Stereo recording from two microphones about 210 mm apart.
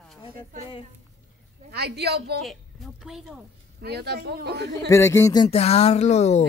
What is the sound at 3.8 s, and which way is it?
Speech, 50° right (ahead or behind).